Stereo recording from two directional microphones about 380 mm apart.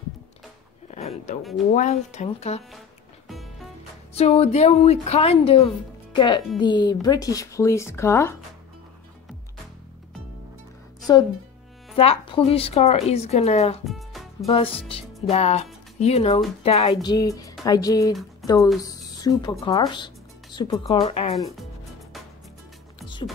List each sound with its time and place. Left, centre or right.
0.8 s a sound: centre
1.7 s speech: centre
4.1 s speech: centre
11.0 s music: centre
11.9 s speech: centre
13.8 s music: centre
14.4 s speech: centre